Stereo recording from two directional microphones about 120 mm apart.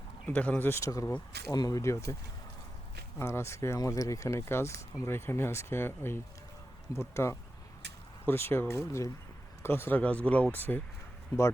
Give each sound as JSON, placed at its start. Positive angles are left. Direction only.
{"t": 0.3, "sound": "speech", "side_deg": 10}
{"t": 3.2, "sound": "speech", "side_deg": 20}